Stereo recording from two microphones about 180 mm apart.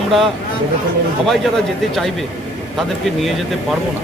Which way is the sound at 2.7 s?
Centre (ahead or behind).